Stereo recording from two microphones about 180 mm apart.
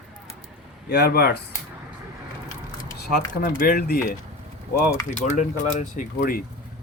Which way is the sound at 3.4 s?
50° left (ahead or behind).